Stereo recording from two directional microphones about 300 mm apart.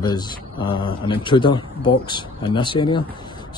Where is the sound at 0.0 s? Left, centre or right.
Centre.